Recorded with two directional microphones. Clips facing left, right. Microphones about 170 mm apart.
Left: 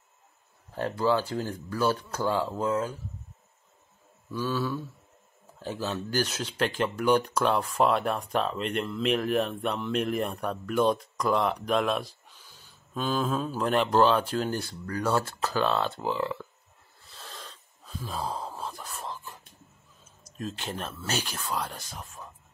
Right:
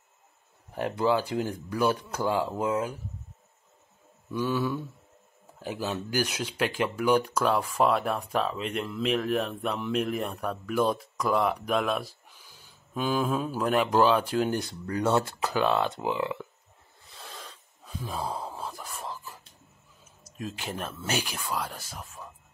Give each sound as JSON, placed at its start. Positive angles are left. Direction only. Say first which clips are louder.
{"t": 0.7, "sound": "speech", "louder": "even", "side_deg": -15}
{"t": 4.3, "sound": "speech", "louder": "right 2 dB", "side_deg": -15}
{"t": 17.1, "sound": "gasp", "louder": "right 1 dB", "side_deg": -10}
{"t": 20.2, "sound": "speech", "louder": "left 1 dB", "side_deg": -10}